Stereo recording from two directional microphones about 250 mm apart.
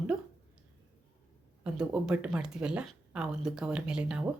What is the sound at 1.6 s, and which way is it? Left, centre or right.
Speech, centre.